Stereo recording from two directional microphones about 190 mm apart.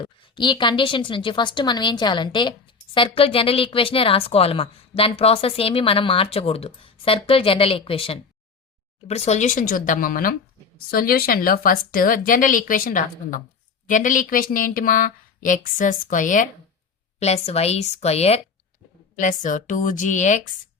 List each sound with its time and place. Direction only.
0.0 s a woman's voice: 25° left (ahead or behind)